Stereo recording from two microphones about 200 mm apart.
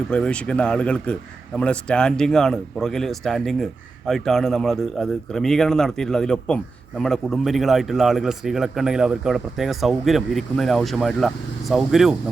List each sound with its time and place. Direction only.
0.1 s speech: 5° left (ahead or behind)